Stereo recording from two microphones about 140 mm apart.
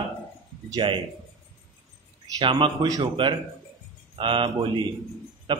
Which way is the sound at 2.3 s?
35° right (ahead or behind).